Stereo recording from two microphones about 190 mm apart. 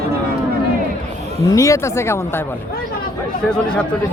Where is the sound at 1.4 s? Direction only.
15° left (ahead or behind).